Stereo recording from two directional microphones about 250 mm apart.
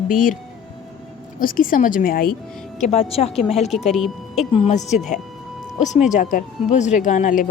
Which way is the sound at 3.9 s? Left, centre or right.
Centre.